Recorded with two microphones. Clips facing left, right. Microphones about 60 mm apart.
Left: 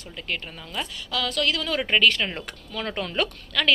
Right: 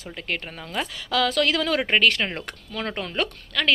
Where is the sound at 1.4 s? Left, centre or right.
Right.